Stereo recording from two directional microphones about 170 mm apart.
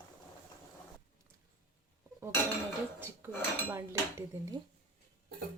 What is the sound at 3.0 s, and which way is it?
Dishes, 15° right (ahead or behind).